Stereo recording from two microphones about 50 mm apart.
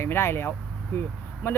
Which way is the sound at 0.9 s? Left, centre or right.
Left.